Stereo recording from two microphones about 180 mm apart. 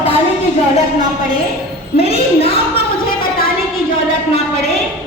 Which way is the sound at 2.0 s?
35° left (ahead or behind).